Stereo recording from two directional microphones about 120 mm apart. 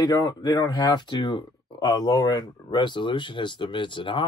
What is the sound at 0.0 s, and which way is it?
Speech, 35° left (ahead or behind).